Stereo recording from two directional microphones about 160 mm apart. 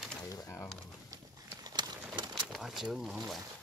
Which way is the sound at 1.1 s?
25° right (ahead or behind).